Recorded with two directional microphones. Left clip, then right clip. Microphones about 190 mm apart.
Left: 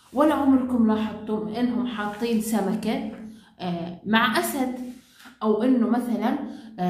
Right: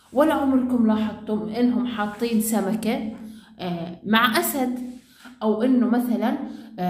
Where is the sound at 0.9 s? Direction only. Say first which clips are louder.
Right 1 dB; 35° right (ahead or behind).